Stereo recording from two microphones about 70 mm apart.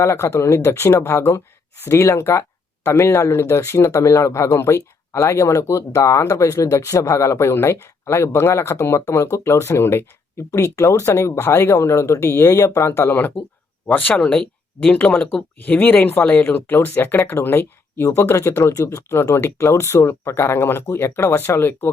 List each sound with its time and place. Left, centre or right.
0.0 s speech: left